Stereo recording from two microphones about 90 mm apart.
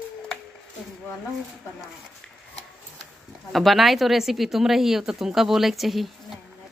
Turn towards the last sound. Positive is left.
turn(degrees=0)  # may be behind; listen again after turning